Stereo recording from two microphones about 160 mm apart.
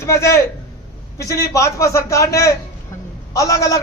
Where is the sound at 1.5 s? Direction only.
20° left (ahead or behind).